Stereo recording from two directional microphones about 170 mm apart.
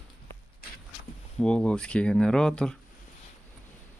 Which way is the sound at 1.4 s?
5° left (ahead or behind).